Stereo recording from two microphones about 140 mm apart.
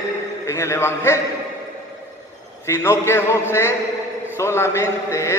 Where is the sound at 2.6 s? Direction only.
20° left (ahead or behind).